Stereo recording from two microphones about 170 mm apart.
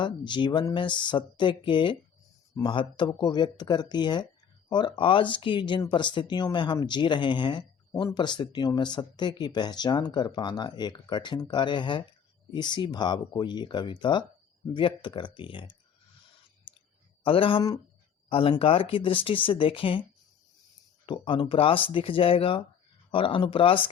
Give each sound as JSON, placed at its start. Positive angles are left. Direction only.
{"t": 0.0, "sound": "speech", "side_deg": 25}
{"t": 17.2, "sound": "speech", "side_deg": 30}
{"t": 21.1, "sound": "speech", "side_deg": 30}